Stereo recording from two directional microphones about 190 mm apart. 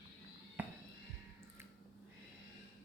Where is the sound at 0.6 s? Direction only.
10° right (ahead or behind).